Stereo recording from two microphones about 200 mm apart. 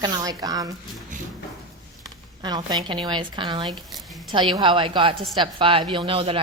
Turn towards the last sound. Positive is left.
turn(degrees=-25)  # may be behind; listen again after turning